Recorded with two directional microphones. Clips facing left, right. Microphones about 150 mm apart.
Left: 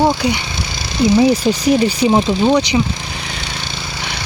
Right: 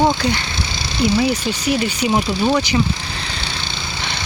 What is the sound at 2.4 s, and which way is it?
Speech, 20° left (ahead or behind).